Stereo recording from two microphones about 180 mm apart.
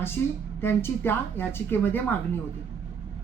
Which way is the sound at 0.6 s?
10° left (ahead or behind).